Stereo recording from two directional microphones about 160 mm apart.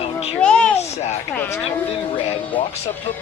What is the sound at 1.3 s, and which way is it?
Speech, 10° left (ahead or behind).